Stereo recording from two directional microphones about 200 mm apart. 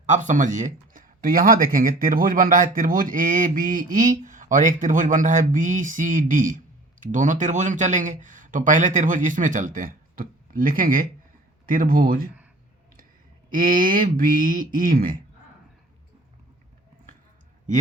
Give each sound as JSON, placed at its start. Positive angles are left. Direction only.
{"t": 0.0, "sound": "speech", "side_deg": -40}
{"t": 13.5, "sound": "speech", "side_deg": -45}